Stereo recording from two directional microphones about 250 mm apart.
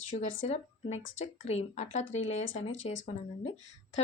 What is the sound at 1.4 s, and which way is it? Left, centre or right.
Speech, left.